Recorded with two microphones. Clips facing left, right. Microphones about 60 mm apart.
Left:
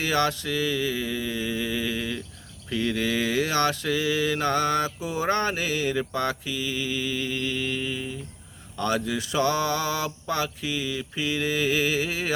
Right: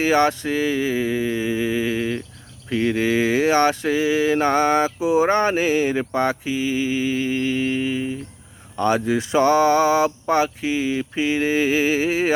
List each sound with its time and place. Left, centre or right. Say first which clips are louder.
0.0 s mantra: right 7 dB; right